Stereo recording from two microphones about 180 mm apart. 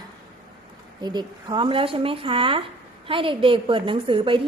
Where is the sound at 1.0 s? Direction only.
25° right (ahead or behind).